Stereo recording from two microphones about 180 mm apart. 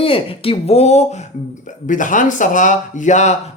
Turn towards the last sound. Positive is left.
turn(degrees=40)  # may be behind; listen again after turning